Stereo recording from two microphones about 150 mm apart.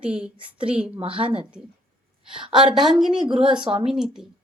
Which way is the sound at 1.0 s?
35° right (ahead or behind).